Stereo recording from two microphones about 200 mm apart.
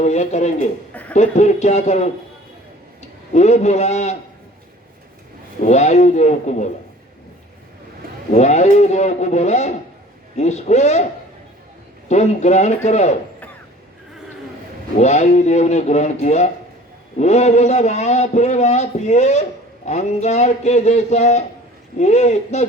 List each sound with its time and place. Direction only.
0.0 s a man's voice: 35° left (ahead or behind)
3.3 s a man's voice: 35° left (ahead or behind)
5.6 s a man's voice: 35° left (ahead or behind)
8.3 s a man's voice: 35° left (ahead or behind)
12.0 s a man's voice: 35° left (ahead or behind)
14.9 s a man's voice: 35° left (ahead or behind)